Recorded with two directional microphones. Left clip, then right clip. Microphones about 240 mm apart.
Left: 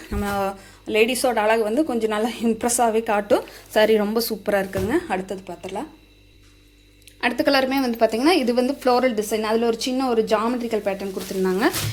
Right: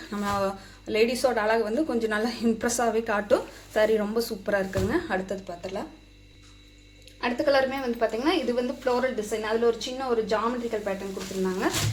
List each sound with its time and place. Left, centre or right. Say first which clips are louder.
0.1 s a woman's voice: left 3 dB; left
7.2 s a woman's voice: left 4 dB; left